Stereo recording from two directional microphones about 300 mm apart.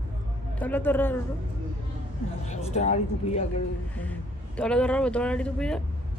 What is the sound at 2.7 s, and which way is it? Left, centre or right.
Speech, left.